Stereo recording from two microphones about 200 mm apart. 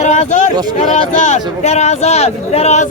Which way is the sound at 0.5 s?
20° right (ahead or behind).